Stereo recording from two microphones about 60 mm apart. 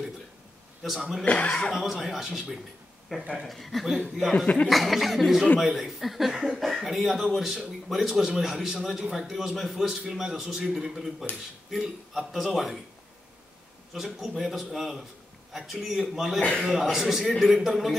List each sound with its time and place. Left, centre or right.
0.8 s a man's voice: centre
1.2 s speech: centre
1.8 s a man's voice: centre
13.9 s a man's voice: centre